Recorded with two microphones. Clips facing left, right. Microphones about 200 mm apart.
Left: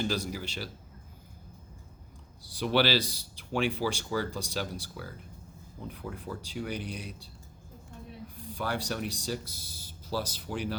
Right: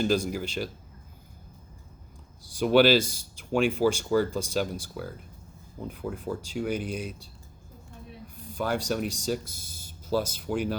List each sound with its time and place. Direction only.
0.0 s speech: 50° right (ahead or behind)
2.4 s speech: 45° right (ahead or behind)
8.4 s speech: 45° right (ahead or behind)